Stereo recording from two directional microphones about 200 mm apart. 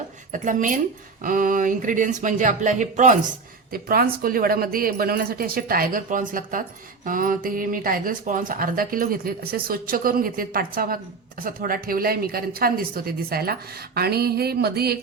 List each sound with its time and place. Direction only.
0.3 s speech: 40° right (ahead or behind)